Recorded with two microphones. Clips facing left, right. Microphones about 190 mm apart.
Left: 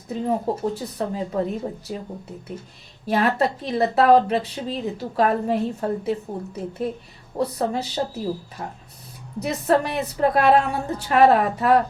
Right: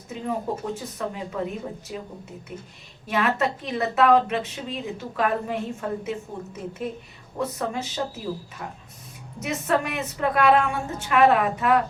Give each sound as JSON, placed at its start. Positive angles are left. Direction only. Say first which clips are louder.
{"t": 0.1, "sound": "a woman's voice", "louder": "left 5 dB", "side_deg": 35}
{"t": 3.1, "sound": "a woman's voice", "louder": "left 3 dB", "side_deg": 35}